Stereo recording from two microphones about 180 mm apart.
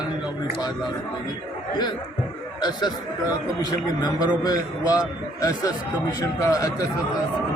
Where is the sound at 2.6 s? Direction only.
25° left (ahead or behind).